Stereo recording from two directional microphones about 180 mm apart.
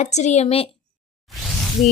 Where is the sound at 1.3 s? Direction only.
Centre (ahead or behind).